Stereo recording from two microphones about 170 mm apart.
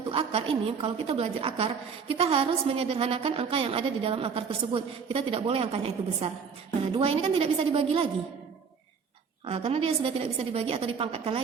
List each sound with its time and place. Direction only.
0.1 s a woman's voice: 35° right (ahead or behind)
9.5 s a woman's voice: 35° right (ahead or behind)